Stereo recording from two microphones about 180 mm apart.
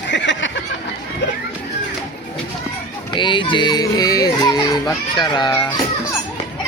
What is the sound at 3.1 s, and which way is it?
Speech, 25° left (ahead or behind).